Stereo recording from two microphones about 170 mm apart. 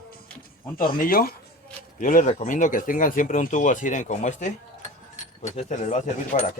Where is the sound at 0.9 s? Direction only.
60° left (ahead or behind).